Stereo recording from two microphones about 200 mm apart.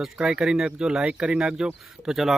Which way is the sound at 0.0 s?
5° right (ahead or behind).